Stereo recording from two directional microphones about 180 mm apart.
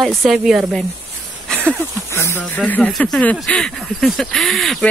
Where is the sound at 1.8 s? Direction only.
15° right (ahead or behind).